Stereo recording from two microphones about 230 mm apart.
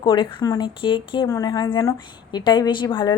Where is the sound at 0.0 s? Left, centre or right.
Left.